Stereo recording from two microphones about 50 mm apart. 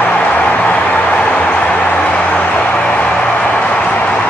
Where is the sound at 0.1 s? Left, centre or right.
Left.